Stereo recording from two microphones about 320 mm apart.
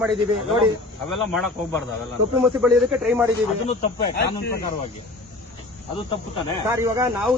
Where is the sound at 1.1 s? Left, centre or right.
Centre.